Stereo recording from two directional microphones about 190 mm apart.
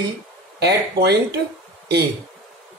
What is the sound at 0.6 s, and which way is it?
Speech, 60° right (ahead or behind).